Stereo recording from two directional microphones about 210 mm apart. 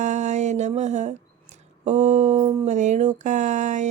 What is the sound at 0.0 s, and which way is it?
Speech, 35° right (ahead or behind).